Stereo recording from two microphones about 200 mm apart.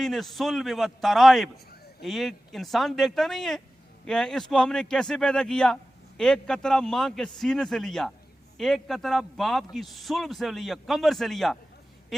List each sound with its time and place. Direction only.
0.0 s a man's voice: centre (ahead or behind)